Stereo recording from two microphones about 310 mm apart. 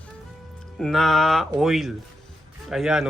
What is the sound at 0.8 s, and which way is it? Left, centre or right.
Speech, centre.